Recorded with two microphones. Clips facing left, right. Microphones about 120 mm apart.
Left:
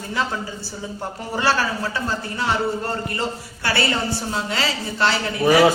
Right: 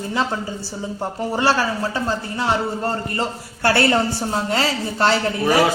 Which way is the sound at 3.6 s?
50° right (ahead or behind).